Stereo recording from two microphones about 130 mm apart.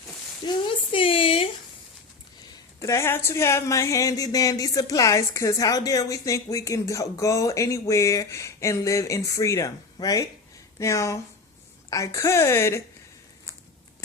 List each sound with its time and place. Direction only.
0.4 s a woman's voice: 45° left (ahead or behind)
2.8 s speech: 20° left (ahead or behind)